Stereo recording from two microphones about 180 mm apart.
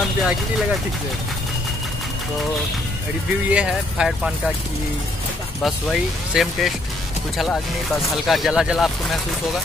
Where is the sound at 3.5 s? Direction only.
5° right (ahead or behind).